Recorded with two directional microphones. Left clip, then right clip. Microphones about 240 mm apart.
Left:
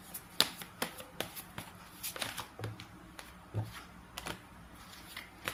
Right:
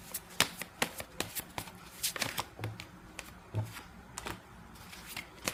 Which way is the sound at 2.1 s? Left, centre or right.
Right.